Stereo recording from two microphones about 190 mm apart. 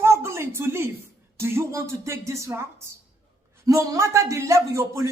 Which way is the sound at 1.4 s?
15° right (ahead or behind).